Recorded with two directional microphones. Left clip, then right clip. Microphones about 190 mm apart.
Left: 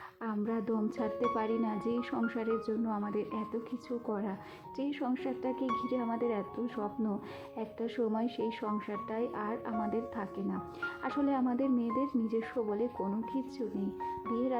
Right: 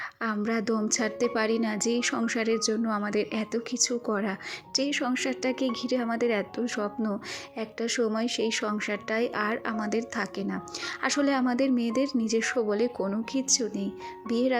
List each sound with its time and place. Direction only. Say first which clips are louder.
0.2 s speech: right 6 dB; 20° right (ahead or behind)